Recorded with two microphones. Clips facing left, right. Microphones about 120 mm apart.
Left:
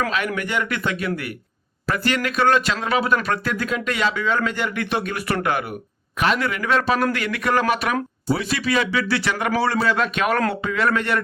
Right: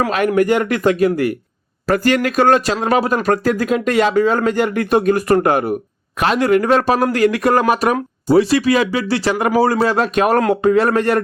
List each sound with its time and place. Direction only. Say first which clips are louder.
0.3 s speech: right 10 dB; 45° right (ahead or behind)